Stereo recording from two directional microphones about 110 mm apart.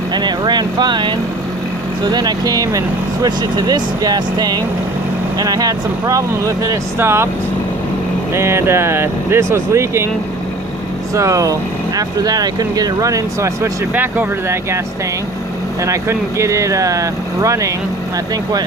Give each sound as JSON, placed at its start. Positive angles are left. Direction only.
{"t": 0.1, "sound": "speech", "side_deg": -40}
{"t": 8.3, "sound": "speech", "side_deg": -25}
{"t": 11.1, "sound": "speech", "side_deg": -30}
{"t": 13.9, "sound": "speech", "side_deg": -15}
{"t": 15.8, "sound": "speech", "side_deg": -25}